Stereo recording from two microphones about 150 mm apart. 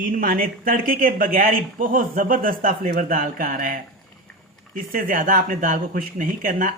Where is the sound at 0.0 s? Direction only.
70° right (ahead or behind).